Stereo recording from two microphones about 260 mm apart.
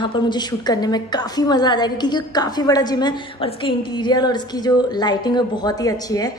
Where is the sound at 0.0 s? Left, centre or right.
Centre.